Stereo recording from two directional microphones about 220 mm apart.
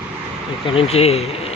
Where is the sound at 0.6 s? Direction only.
25° left (ahead or behind).